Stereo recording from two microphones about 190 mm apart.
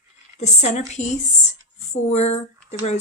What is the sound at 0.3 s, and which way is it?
Speech, 35° left (ahead or behind).